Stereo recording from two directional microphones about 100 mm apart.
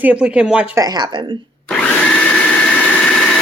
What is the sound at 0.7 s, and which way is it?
Speech, 40° right (ahead or behind).